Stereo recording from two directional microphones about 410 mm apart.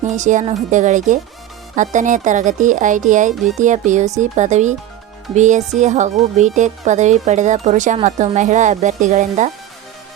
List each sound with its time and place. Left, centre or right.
0.0 s speech: centre